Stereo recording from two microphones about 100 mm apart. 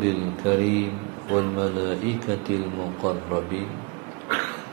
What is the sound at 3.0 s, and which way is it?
Speech, 35° right (ahead or behind).